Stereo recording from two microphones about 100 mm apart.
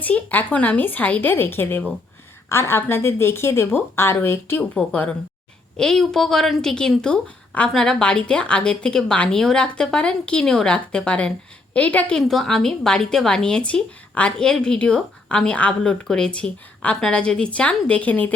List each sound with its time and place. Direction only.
0.0 s a woman's voice: 15° left (ahead or behind)
4.8 s a woman's voice: 10° left (ahead or behind)